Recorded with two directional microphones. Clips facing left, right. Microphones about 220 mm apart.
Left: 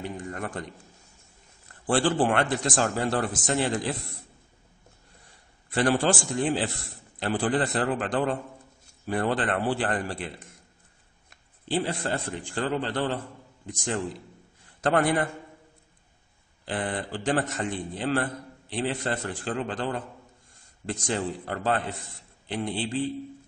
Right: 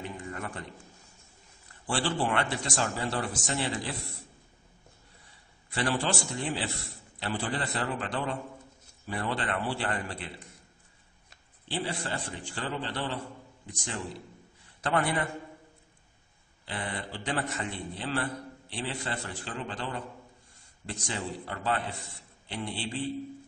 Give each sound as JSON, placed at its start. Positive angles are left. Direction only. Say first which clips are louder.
{"t": 0.2, "sound": "a sound", "louder": "left 4 dB", "side_deg": 45}
{"t": 1.9, "sound": "a man's voice", "louder": "left 6 dB", "side_deg": 50}
{"t": 5.2, "sound": "a man's voice", "louder": "left 2 dB", "side_deg": 45}
{"t": 11.6, "sound": "a man's voice", "louder": "left 6 dB", "side_deg": 50}
{"t": 14.8, "sound": "a man's voice", "louder": "left 6 dB", "side_deg": 45}
{"t": 16.6, "sound": "a man's voice", "louder": "left 6 dB", "side_deg": 50}
{"t": 21.1, "sound": "a man's voice", "louder": "left 6 dB", "side_deg": 50}